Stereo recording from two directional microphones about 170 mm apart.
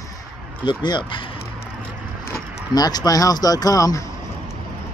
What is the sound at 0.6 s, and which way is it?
Speech, 25° left (ahead or behind).